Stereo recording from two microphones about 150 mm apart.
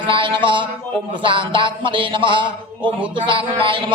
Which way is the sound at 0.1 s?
35° right (ahead or behind).